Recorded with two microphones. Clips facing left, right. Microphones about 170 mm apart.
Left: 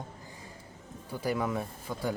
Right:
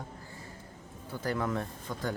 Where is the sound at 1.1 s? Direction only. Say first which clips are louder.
Left 1 dB; 10° left (ahead or behind).